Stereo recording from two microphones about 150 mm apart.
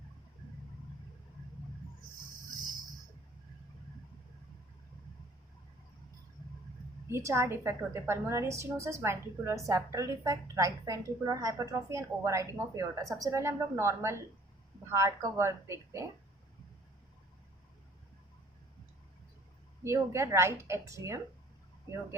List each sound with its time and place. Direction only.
7.1 s a woman's voice: 20° right (ahead or behind)
19.8 s a woman's voice: 20° right (ahead or behind)